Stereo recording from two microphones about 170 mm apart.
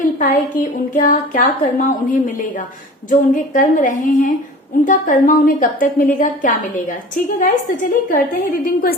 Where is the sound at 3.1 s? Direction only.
50° left (ahead or behind).